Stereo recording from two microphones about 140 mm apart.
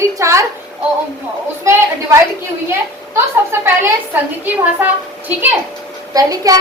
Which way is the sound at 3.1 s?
15° right (ahead or behind).